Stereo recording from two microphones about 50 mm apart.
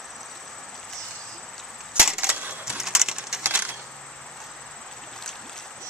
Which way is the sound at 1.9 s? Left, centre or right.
Centre.